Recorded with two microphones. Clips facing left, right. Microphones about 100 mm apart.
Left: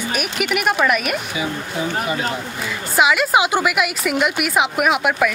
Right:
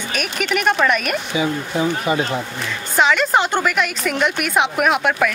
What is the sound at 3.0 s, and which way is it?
A woman's voice, 5° left (ahead or behind).